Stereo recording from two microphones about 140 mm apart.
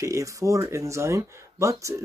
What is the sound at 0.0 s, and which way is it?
Speech, 20° right (ahead or behind).